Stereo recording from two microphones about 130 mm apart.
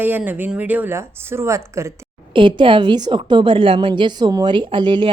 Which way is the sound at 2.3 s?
40° right (ahead or behind).